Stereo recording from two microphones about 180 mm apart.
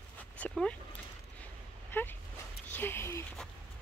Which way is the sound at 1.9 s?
10° left (ahead or behind).